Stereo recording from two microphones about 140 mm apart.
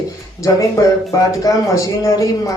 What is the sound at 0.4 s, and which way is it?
Speech, 25° left (ahead or behind).